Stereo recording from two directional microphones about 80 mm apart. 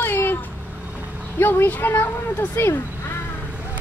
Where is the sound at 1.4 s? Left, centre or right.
Left.